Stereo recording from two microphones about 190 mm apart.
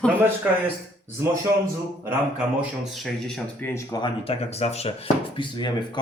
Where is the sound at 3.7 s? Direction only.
20° left (ahead or behind).